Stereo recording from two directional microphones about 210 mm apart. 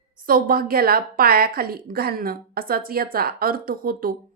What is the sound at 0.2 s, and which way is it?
A woman's voice, 40° right (ahead or behind).